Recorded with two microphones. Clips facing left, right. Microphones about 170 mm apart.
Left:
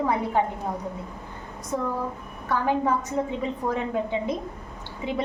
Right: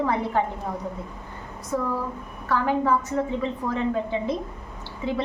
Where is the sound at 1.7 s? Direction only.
20° left (ahead or behind).